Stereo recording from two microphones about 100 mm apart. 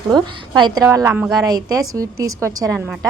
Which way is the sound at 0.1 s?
45° right (ahead or behind).